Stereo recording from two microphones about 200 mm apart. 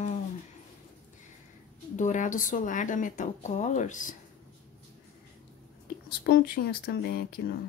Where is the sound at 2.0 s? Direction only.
40° left (ahead or behind).